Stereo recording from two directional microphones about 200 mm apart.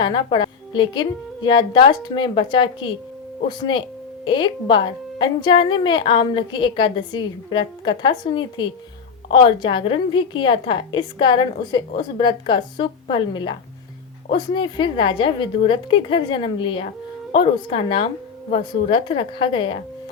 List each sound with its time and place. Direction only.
0.0 s a woman's voice: 25° left (ahead or behind)